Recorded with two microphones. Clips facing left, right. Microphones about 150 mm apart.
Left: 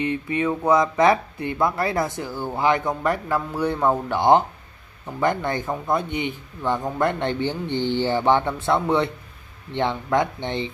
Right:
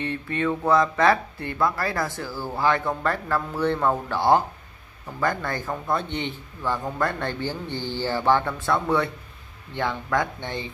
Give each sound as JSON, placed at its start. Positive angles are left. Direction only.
{"t": 0.0, "sound": "speech", "side_deg": 15}